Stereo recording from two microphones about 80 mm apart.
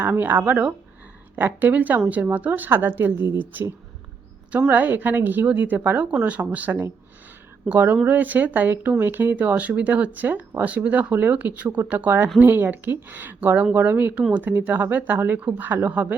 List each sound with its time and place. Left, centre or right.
0.0 s a woman's voice: right